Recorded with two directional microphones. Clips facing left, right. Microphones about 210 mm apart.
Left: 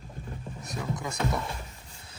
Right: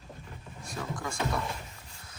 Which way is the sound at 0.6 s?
20° left (ahead or behind).